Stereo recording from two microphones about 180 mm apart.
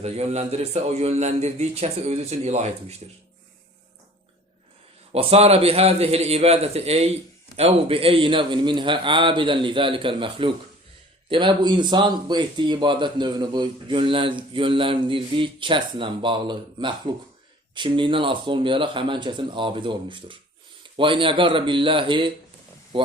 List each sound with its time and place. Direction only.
0.0 s a man's voice: 35° right (ahead or behind)
5.1 s a man's voice: 35° right (ahead or behind)